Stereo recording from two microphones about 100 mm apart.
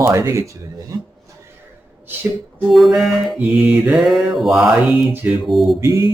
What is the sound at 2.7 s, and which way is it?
Mantra, centre (ahead or behind).